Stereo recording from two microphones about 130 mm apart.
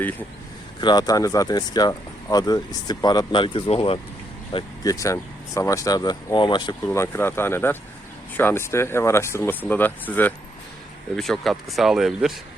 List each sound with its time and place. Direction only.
0.8 s speech: 35° left (ahead or behind)
4.8 s speech: 25° left (ahead or behind)
6.8 s speech: 20° left (ahead or behind)
11.2 s speech: centre (ahead or behind)